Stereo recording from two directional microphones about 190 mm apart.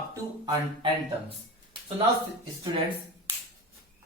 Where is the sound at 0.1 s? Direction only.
20° right (ahead or behind).